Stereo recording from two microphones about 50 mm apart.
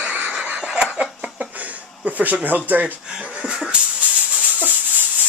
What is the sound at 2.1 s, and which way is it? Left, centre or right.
Speech, right.